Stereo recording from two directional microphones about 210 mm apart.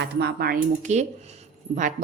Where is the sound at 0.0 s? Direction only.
50° right (ahead or behind).